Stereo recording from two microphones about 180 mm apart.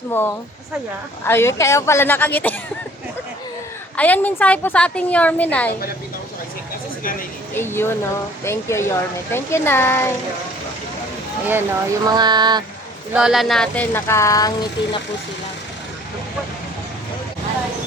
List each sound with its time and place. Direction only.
0.1 s a woman's voice: 10° left (ahead or behind)
3.9 s a woman's voice: 10° left (ahead or behind)
7.5 s a woman's voice: 15° left (ahead or behind)
11.4 s speech: 10° right (ahead or behind)
13.1 s a woman's voice: centre (ahead or behind); by 14.7 s 20° left (ahead or behind)